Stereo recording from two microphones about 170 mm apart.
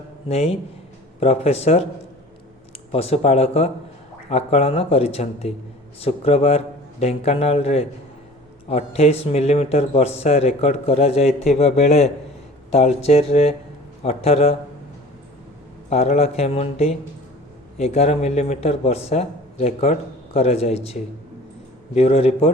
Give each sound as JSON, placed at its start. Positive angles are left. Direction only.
{"t": 0.3, "sound": "speech", "side_deg": 35}
{"t": 2.9, "sound": "speech", "side_deg": 35}
{"t": 15.9, "sound": "speech", "side_deg": 40}